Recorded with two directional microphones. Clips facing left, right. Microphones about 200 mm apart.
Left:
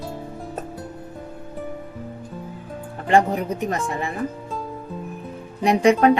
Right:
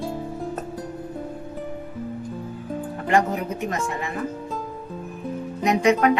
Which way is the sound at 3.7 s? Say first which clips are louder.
Left 2 dB; 35° left (ahead or behind).